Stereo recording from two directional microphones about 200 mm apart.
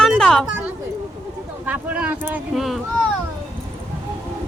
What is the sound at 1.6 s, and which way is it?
Speech, 5° right (ahead or behind).